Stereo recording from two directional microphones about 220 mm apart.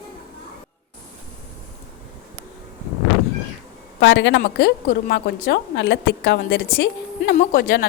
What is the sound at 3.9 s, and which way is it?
A woman's voice, 55° left (ahead or behind).